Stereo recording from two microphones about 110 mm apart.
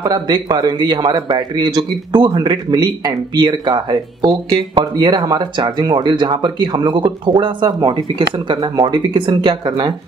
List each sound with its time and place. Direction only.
0.0 s speech: 40° right (ahead or behind)